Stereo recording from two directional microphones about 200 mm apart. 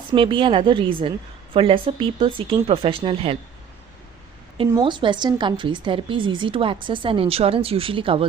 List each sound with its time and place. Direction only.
0.1 s a woman's voice: 25° right (ahead or behind)
4.7 s a woman's voice: 25° right (ahead or behind)